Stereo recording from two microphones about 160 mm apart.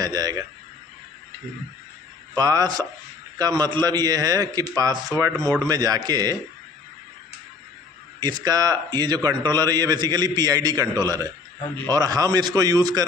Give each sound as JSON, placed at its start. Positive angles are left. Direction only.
{"t": 0.0, "sound": "a man's voice", "side_deg": -25}
{"t": 2.3, "sound": "a man's voice", "side_deg": -25}
{"t": 8.2, "sound": "a man's voice", "side_deg": -25}